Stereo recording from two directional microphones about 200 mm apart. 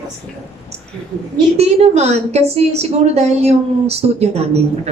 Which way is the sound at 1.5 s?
30° right (ahead or behind).